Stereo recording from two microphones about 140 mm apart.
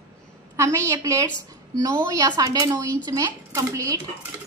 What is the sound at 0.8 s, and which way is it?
A woman's voice, 25° right (ahead or behind).